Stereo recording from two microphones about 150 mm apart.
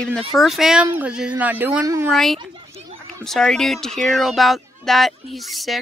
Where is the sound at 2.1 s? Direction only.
5° left (ahead or behind).